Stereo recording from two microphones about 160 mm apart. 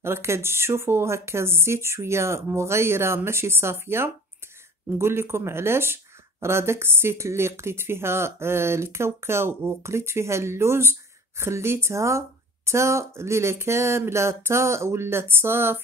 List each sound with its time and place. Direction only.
0.0 s a woman's voice: 15° right (ahead or behind)